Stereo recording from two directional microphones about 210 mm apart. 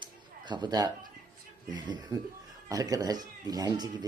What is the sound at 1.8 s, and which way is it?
Speech, 20° right (ahead or behind).